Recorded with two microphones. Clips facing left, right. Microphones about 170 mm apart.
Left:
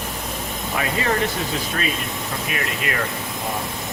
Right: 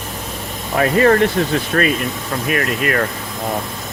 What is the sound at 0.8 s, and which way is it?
Speech, 55° right (ahead or behind).